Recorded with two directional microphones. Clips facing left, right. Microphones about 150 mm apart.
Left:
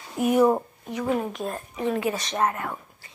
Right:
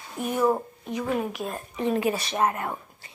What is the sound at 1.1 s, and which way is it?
Speech, centre (ahead or behind).